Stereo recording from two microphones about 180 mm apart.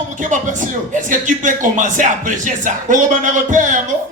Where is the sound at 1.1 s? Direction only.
45° right (ahead or behind).